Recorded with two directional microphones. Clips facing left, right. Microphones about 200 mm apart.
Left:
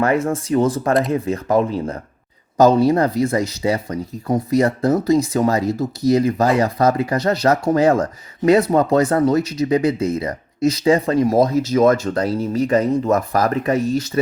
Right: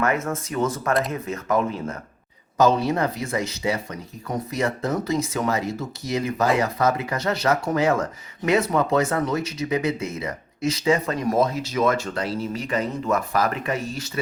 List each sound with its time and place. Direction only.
0.0 s speech: 30° left (ahead or behind)